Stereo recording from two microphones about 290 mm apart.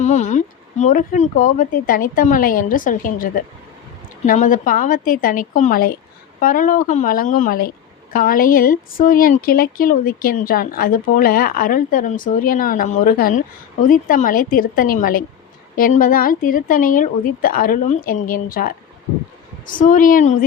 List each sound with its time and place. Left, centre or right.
0.0 s speech: left
4.3 s speech: left